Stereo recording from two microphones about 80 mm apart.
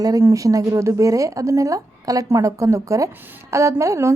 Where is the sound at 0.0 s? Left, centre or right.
Right.